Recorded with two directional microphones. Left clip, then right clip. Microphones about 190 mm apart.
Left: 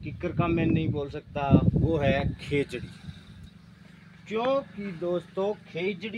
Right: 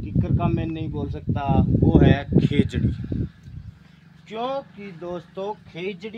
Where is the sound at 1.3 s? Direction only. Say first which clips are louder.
Right 2 dB; 45° right (ahead or behind).